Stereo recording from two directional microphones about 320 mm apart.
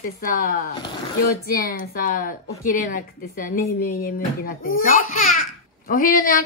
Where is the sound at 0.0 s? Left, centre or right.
Left.